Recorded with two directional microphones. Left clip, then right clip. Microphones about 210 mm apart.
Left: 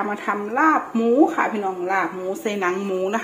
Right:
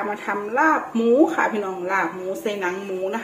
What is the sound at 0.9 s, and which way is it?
Speech, 15° left (ahead or behind).